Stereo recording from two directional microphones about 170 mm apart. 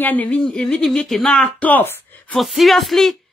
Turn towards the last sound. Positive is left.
turn(degrees=0)  # may be behind; listen again after turning